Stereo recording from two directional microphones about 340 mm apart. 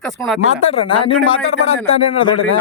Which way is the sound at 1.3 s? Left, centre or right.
Left.